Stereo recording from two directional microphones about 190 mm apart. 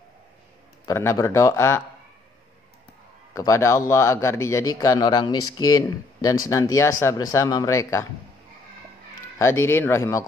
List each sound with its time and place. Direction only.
0.8 s a man's voice: 15° left (ahead or behind)
3.3 s a man's voice: 15° left (ahead or behind)
9.4 s a man's voice: 15° left (ahead or behind)